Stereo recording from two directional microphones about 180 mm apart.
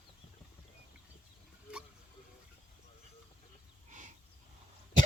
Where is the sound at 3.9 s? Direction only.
45° right (ahead or behind).